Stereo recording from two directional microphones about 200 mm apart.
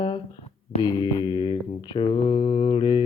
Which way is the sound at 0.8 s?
25° left (ahead or behind).